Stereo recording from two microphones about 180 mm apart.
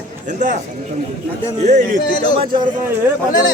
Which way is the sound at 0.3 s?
45° right (ahead or behind).